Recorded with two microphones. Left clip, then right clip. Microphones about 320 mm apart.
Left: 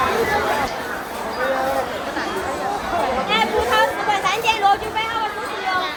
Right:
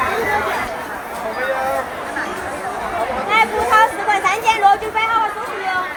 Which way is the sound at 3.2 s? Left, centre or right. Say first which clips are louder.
Right 7 dB; centre.